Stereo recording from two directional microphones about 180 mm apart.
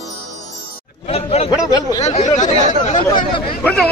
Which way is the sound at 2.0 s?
40° left (ahead or behind).